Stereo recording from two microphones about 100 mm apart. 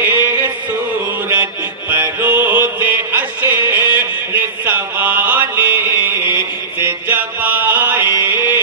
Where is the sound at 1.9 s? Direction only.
20° right (ahead or behind).